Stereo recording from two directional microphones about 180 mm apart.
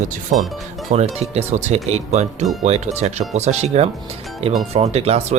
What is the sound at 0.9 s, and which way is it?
Speech, 35° right (ahead or behind).